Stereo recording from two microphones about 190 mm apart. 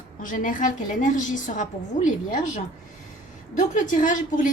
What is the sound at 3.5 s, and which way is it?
Speech, 45° left (ahead or behind).